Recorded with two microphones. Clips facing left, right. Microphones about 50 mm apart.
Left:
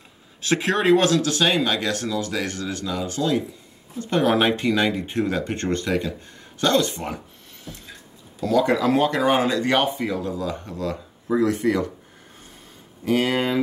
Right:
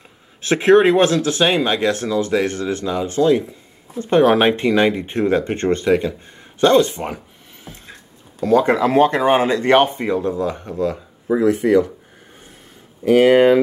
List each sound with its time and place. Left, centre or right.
0.4 s speech: right
13.0 s speech: right